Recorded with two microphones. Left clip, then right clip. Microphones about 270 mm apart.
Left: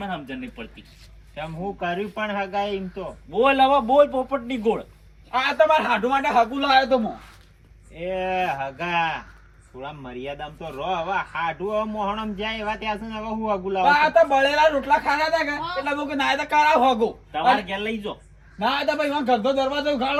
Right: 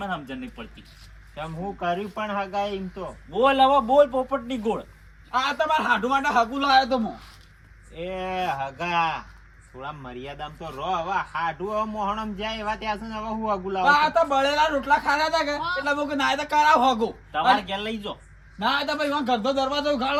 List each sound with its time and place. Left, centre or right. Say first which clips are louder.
0.0 s speech: even; centre
7.9 s a man's voice: left 4 dB; centre